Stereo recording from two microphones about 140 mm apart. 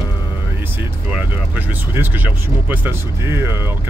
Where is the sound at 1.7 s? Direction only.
15° right (ahead or behind).